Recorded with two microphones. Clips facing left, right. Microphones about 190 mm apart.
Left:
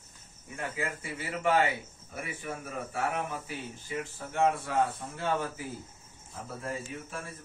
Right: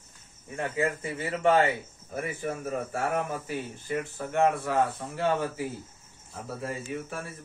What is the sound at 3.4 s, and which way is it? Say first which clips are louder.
Speech: right 6 dB; 60° right (ahead or behind).